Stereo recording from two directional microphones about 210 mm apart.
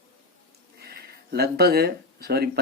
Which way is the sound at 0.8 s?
50° right (ahead or behind).